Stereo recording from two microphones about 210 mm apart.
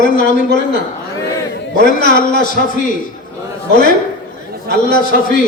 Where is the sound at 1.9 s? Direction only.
40° left (ahead or behind).